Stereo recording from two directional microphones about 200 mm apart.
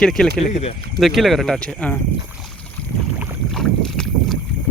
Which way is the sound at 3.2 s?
5° right (ahead or behind).